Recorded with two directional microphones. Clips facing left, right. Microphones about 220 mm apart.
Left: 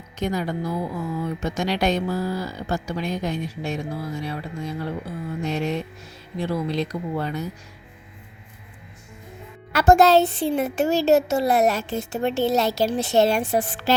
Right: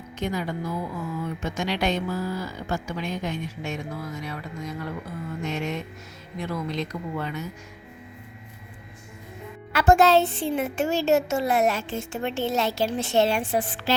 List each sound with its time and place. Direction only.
0.2 s speech: 40° left (ahead or behind)
9.7 s speech: 40° left (ahead or behind)